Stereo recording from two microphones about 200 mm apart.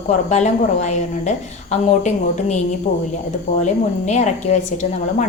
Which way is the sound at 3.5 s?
35° left (ahead or behind).